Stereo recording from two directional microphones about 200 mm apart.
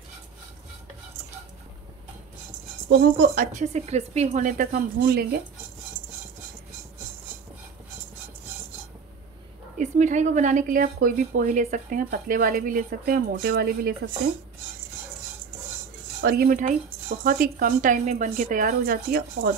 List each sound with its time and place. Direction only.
2.9 s speech: 50° right (ahead or behind)
3.5 s speech: 35° right (ahead or behind); by 5.4 s 50° right (ahead or behind)
9.8 s speech: 35° right (ahead or behind)
16.2 s speech: 50° right (ahead or behind)